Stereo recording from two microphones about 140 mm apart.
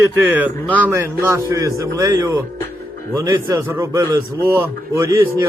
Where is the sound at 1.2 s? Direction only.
20° right (ahead or behind).